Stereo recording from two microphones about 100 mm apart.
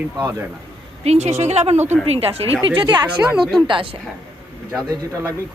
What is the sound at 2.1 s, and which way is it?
Speech, 75° right (ahead or behind).